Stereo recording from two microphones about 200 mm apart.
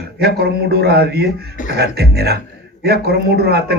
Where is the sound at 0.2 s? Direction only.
55° right (ahead or behind).